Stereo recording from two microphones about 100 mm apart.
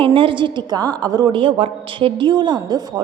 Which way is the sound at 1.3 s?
60° right (ahead or behind).